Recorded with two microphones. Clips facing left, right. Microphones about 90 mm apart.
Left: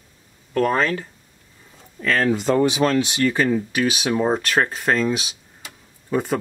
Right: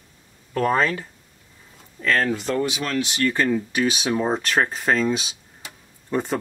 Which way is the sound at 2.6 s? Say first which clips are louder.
Left 6 dB; 35° left (ahead or behind).